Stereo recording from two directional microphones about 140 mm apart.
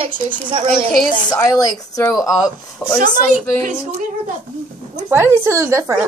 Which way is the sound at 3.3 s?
70° right (ahead or behind).